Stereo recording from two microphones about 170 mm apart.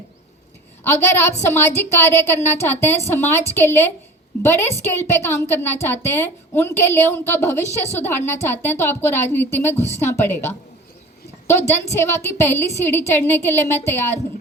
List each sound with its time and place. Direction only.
0.9 s a woman's voice: 15° left (ahead or behind)
11.9 s a woman's voice: 15° left (ahead or behind)